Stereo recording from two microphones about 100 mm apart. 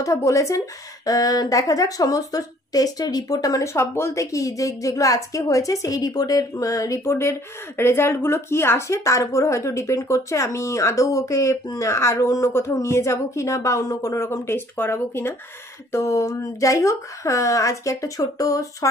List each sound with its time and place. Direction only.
0.0 s a woman's voice: 30° left (ahead or behind)